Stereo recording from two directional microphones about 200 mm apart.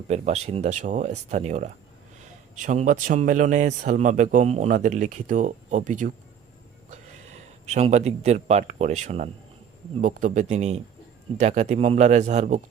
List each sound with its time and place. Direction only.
0.1 s speech: 35° right (ahead or behind)